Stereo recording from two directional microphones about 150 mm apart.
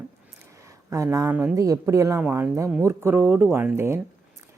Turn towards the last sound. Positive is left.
turn(degrees=-15)  # may be behind; listen again after turning